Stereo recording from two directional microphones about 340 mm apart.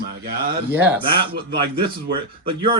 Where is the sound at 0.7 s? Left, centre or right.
Centre.